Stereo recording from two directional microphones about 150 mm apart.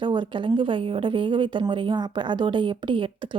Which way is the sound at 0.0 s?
30° right (ahead or behind).